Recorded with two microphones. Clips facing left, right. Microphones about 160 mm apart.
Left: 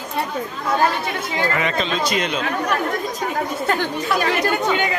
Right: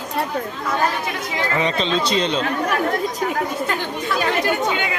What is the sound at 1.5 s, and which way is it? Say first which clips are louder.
Speech: right 2 dB; 30° right (ahead or behind).